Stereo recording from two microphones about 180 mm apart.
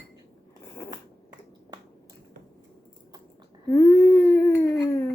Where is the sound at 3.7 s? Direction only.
10° left (ahead or behind).